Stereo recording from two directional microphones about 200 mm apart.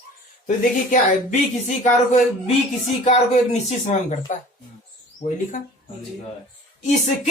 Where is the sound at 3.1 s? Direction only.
30° left (ahead or behind).